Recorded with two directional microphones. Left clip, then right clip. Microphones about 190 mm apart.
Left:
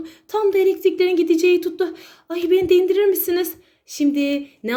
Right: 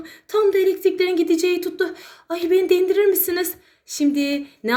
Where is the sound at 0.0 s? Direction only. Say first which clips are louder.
Right 1 dB; 30° left (ahead or behind).